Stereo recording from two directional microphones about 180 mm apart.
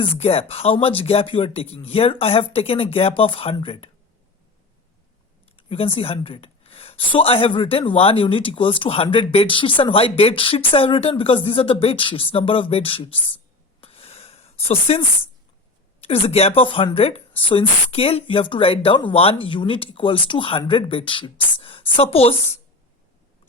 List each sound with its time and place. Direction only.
0.0 s speech: 35° left (ahead or behind)
5.5 s speech: 30° left (ahead or behind)
13.8 s a sound: 35° left (ahead or behind)
16.0 s speech: 30° left (ahead or behind)